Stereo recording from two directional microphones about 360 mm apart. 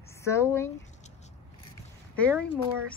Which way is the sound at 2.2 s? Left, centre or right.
Centre.